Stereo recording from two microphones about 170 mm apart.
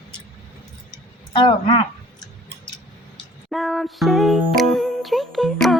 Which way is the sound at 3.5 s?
Centre (ahead or behind).